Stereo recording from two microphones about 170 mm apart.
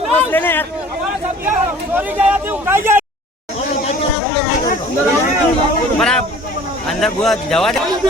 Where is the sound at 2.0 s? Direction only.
10° right (ahead or behind).